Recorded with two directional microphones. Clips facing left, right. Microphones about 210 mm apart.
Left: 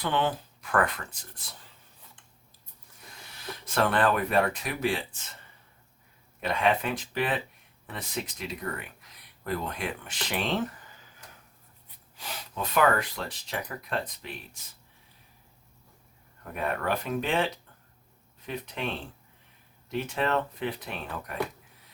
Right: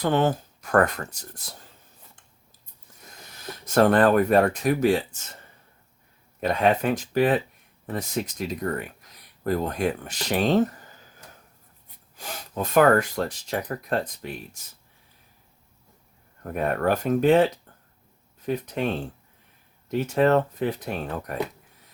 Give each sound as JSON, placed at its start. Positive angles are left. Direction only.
{"t": 0.0, "sound": "speech", "side_deg": -45}
{"t": 3.4, "sound": "speech", "side_deg": -45}
{"t": 6.4, "sound": "speech", "side_deg": -40}
{"t": 12.1, "sound": "speech", "side_deg": -45}
{"t": 16.4, "sound": "speech", "side_deg": -45}
{"t": 19.9, "sound": "speech", "side_deg": -40}